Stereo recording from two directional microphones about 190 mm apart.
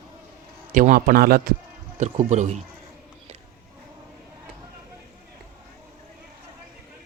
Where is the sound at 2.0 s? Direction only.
35° right (ahead or behind).